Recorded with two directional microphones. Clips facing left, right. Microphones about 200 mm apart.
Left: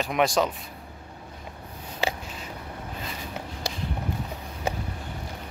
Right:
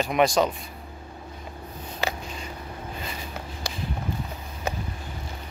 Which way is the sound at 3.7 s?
35° left (ahead or behind).